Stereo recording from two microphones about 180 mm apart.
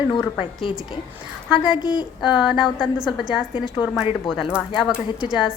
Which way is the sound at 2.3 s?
5° right (ahead or behind).